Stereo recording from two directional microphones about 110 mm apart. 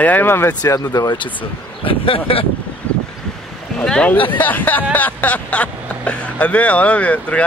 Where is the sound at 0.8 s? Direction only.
40° left (ahead or behind).